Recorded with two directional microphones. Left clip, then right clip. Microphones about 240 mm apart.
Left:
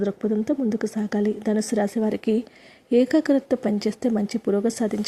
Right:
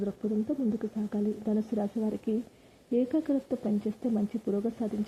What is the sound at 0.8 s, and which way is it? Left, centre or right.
Speech, left.